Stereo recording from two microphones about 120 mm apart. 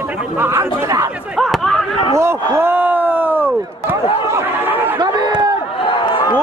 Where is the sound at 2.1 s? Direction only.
20° right (ahead or behind).